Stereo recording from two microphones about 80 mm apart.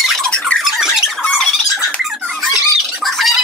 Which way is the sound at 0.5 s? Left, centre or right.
Centre.